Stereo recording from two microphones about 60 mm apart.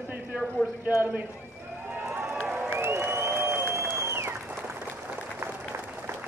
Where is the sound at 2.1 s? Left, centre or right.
Right.